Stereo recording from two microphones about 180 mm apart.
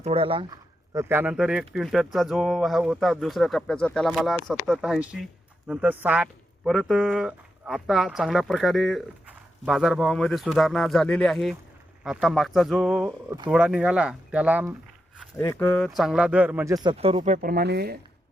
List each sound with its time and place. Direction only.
0.0 s speech: 30° right (ahead or behind)
0.9 s speech: 15° right (ahead or behind)
15.2 s speech: 10° left (ahead or behind); by 16.7 s 10° right (ahead or behind)
16.7 s speech: 30° right (ahead or behind)
17.3 s speech: 55° right (ahead or behind)